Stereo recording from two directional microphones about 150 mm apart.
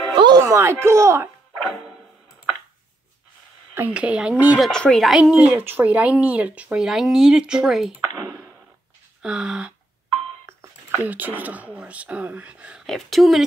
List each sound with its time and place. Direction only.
0.1 s a sound: 30° right (ahead or behind)
0.4 s speech: 20° right (ahead or behind)
1.6 s music: centre (ahead or behind)
3.7 s speech: 10° right (ahead or behind)
4.6 s speech: 5° left (ahead or behind)
9.2 s speech: 5° right (ahead or behind)
11.1 s speech: 10° right (ahead or behind)